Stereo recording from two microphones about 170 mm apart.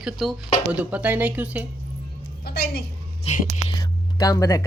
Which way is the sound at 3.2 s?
30° left (ahead or behind).